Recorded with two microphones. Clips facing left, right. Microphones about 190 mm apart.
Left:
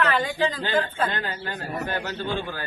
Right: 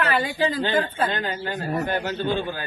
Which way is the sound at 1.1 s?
20° right (ahead or behind).